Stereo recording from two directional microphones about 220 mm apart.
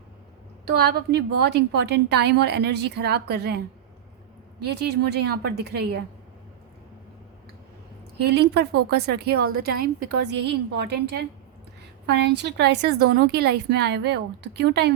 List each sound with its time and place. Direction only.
0.6 s a woman's voice: 45° right (ahead or behind)
4.6 s a woman's voice: 50° right (ahead or behind)
8.2 s a woman's voice: 50° right (ahead or behind)